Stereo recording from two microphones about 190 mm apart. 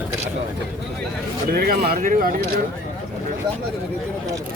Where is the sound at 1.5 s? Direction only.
55° right (ahead or behind).